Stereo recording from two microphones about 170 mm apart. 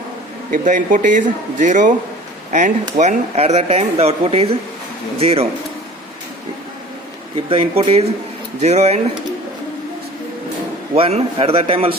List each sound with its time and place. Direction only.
0.5 s a man's voice: 50° right (ahead or behind)
7.3 s speech: 30° right (ahead or behind)
10.9 s speech: 35° right (ahead or behind)